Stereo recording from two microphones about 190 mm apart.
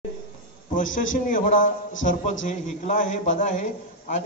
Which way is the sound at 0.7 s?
45° left (ahead or behind).